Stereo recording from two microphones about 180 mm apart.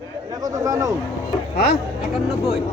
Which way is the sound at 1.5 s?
60° left (ahead or behind).